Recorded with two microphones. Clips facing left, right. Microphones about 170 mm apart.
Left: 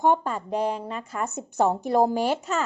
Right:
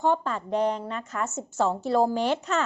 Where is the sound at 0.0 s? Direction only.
15° left (ahead or behind).